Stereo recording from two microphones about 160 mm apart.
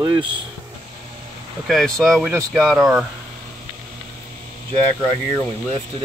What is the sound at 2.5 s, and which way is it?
Speech, centre (ahead or behind).